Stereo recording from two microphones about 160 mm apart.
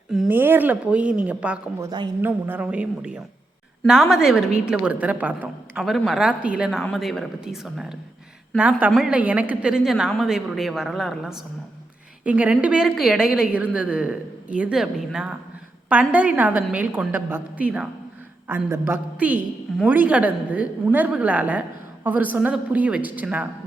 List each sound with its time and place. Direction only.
0.1 s a woman's voice: 5° right (ahead or behind)
1.8 s a woman's voice: 25° right (ahead or behind)
2.2 s a woman's voice: 10° right (ahead or behind)